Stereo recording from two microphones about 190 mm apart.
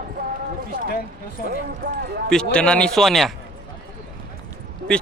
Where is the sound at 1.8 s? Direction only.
65° right (ahead or behind).